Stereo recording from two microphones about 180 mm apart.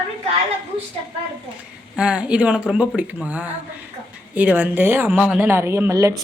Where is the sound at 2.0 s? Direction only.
5° right (ahead or behind).